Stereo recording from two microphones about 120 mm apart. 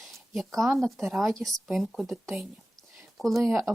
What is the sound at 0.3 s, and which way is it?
Speech, centre (ahead or behind).